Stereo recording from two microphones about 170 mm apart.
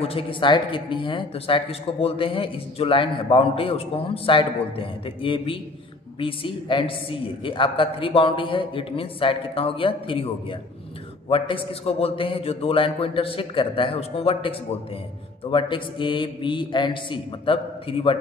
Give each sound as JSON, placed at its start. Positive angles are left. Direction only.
{"t": 0.0, "sound": "a man's voice", "side_deg": 35}